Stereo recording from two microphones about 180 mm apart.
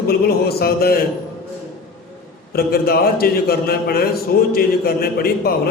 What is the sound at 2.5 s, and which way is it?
A man's voice, 55° left (ahead or behind).